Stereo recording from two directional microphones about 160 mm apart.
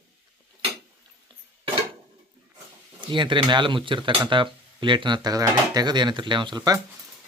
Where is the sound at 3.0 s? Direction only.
30° right (ahead or behind).